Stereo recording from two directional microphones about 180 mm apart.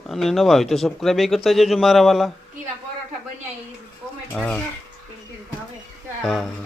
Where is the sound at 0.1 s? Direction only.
Centre (ahead or behind).